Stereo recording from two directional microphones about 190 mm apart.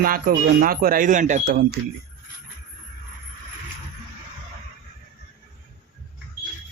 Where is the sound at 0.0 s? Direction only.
50° right (ahead or behind).